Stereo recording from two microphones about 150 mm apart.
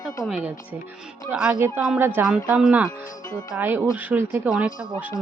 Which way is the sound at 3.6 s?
15° right (ahead or behind).